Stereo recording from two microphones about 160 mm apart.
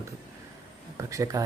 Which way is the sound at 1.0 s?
20° right (ahead or behind).